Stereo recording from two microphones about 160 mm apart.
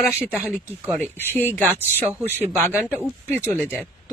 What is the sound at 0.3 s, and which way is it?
Speech, 10° right (ahead or behind).